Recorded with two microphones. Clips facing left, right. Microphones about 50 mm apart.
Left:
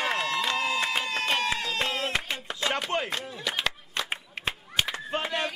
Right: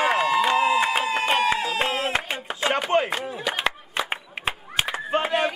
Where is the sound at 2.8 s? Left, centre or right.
Centre.